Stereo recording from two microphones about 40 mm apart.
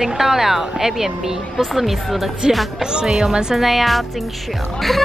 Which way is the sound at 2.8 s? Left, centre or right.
Centre.